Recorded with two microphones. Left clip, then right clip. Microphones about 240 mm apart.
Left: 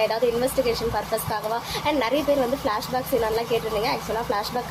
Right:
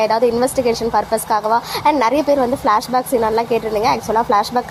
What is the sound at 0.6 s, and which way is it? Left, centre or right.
Speech, right.